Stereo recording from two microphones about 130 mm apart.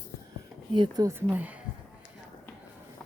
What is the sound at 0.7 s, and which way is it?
Speech, 30° right (ahead or behind).